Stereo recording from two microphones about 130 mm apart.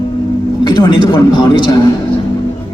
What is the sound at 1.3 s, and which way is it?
Speech, 35° left (ahead or behind).